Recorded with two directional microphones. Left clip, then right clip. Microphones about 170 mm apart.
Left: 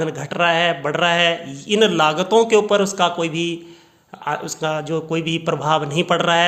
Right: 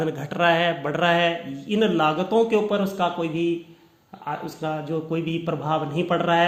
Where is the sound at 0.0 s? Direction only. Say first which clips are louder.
Left 3 dB; 10° left (ahead or behind).